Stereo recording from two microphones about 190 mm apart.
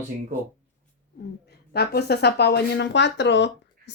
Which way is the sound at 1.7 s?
60° left (ahead or behind).